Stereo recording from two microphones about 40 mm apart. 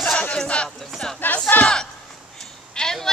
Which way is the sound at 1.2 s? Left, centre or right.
Left.